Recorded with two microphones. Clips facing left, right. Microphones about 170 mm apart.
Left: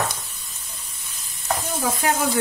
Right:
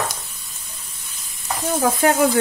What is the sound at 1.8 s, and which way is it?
Speech, 55° right (ahead or behind).